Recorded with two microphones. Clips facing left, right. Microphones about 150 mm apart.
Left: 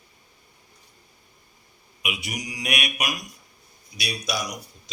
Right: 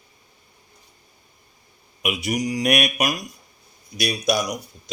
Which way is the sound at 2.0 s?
40° right (ahead or behind).